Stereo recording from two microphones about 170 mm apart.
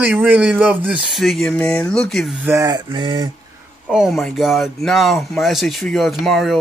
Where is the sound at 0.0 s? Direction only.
10° right (ahead or behind).